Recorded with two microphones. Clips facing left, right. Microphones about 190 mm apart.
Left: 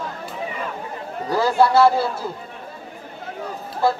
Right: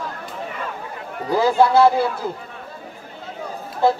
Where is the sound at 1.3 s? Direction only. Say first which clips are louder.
Right 1 dB; 15° right (ahead or behind).